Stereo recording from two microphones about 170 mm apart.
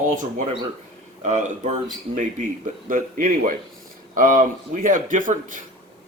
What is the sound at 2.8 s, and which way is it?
Speech, 55° right (ahead or behind).